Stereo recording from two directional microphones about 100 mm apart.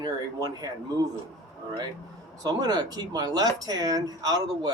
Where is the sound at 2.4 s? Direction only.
40° right (ahead or behind).